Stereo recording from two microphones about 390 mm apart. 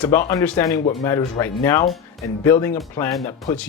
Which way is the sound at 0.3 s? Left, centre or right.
Centre.